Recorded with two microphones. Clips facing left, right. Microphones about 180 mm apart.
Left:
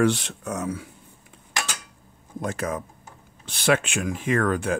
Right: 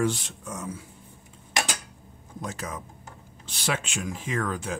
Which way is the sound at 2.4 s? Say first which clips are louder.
Left 7 dB; 55° left (ahead or behind).